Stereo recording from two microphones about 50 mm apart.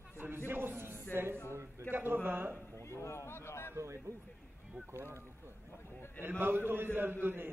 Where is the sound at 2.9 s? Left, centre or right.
Left.